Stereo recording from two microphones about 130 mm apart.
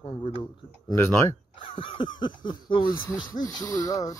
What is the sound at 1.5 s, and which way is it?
Speech, 40° left (ahead or behind).